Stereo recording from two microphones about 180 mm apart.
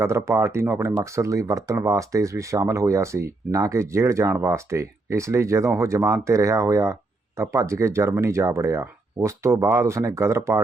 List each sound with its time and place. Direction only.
0.0 s speech: 15° right (ahead or behind)